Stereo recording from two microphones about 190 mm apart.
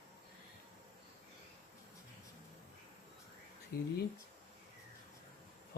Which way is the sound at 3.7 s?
55° left (ahead or behind).